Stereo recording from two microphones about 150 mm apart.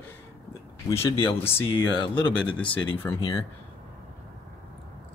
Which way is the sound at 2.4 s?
10° left (ahead or behind).